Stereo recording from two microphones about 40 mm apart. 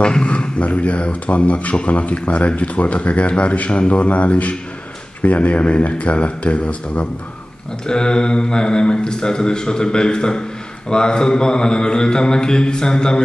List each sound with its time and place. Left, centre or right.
0.0 s speech: left
7.8 s a man's voice: centre